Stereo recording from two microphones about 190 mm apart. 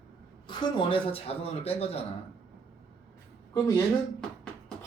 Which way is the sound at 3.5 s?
20° left (ahead or behind).